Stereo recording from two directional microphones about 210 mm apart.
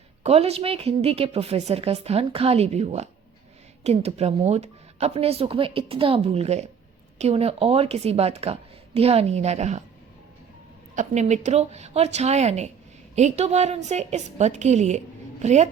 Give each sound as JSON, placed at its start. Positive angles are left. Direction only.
{"t": 0.2, "sound": "a woman's voice", "side_deg": -30}
{"t": 10.9, "sound": "a woman's voice", "side_deg": -35}